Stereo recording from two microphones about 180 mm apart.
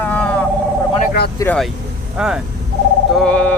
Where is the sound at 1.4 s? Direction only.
20° left (ahead or behind).